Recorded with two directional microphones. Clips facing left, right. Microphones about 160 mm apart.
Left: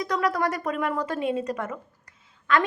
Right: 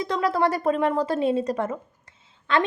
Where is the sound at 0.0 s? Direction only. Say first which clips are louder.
Right 2 dB; 25° right (ahead or behind).